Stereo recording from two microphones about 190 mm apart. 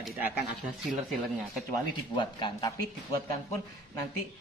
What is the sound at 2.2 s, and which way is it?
Speech, 25° left (ahead or behind).